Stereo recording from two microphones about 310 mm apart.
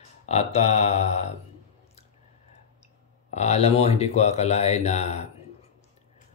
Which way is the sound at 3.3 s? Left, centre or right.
Left.